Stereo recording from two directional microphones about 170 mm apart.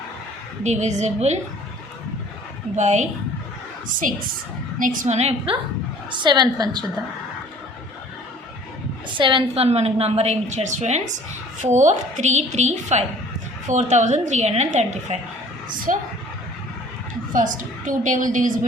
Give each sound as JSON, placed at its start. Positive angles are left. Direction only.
{"t": 0.6, "sound": "a woman's voice", "side_deg": -45}
{"t": 2.7, "sound": "a woman's voice", "side_deg": -45}
{"t": 4.8, "sound": "a woman's voice", "side_deg": -50}
{"t": 6.1, "sound": "a woman's voice", "side_deg": -25}
{"t": 9.0, "sound": "a woman's voice", "side_deg": -30}
{"t": 15.7, "sound": "a woman's voice", "side_deg": -55}
{"t": 17.3, "sound": "a woman's voice", "side_deg": -50}